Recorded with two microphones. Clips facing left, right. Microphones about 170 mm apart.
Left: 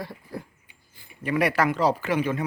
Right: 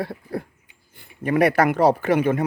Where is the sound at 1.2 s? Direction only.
50° right (ahead or behind).